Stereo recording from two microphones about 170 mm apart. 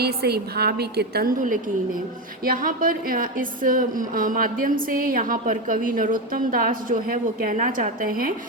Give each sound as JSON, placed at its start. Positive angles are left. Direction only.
{"t": 0.0, "sound": "a woman's voice", "side_deg": -70}